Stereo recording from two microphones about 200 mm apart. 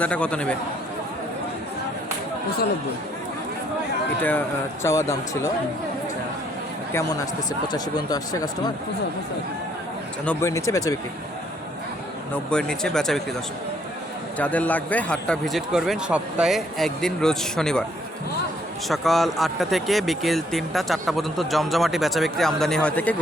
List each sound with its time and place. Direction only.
0.0 s speech: 5° left (ahead or behind)
4.2 s speech: 10° left (ahead or behind)
7.7 s speech: 20° left (ahead or behind)
10.2 s speech: 15° left (ahead or behind)
12.5 s speech: 5° left (ahead or behind)
14.3 s speech: 5° left (ahead or behind)
18.9 s speech: centre (ahead or behind)